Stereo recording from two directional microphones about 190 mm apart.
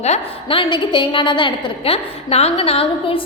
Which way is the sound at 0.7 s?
25° left (ahead or behind).